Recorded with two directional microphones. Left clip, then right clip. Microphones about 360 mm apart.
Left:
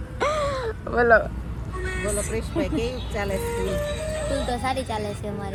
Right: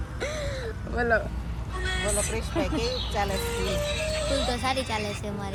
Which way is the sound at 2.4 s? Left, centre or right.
Centre.